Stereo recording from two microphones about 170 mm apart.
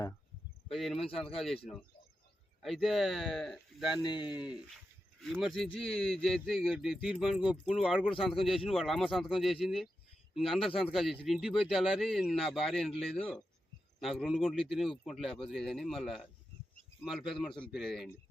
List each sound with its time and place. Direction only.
0.7 s speech: centre (ahead or behind)
2.6 s speech: centre (ahead or behind)
4.0 s speech: 25° left (ahead or behind)
5.2 s speech: centre (ahead or behind)